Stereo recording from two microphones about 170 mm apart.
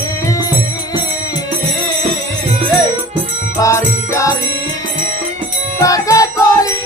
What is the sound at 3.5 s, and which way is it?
Music, 20° left (ahead or behind).